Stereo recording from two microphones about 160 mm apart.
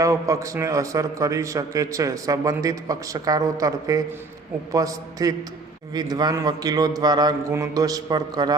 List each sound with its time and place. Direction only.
0.0 s a man's voice: 20° right (ahead or behind)